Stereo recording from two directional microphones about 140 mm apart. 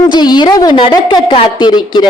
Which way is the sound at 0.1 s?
30° left (ahead or behind).